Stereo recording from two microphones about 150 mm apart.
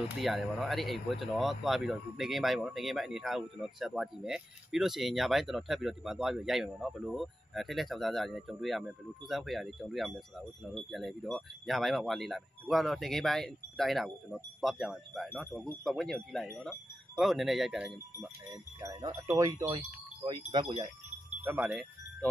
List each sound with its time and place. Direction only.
0.2 s speech: centre (ahead or behind)
18.5 s speech: 25° right (ahead or behind)
20.2 s speech: 30° right (ahead or behind)
21.4 s speech: 10° right (ahead or behind)